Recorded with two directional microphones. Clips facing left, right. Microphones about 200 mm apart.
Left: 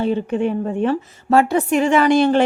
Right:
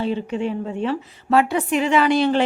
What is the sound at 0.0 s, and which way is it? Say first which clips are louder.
A woman's voice: left 4 dB; 50° left (ahead or behind).